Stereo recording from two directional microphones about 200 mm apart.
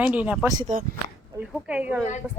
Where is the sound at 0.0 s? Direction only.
5° right (ahead or behind).